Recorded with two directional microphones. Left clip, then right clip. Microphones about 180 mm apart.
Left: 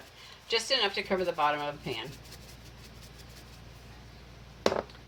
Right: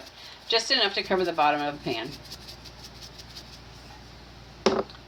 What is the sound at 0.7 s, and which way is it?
Speech, 35° right (ahead or behind).